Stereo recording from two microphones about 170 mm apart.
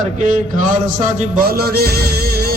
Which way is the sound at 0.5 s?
45° right (ahead or behind).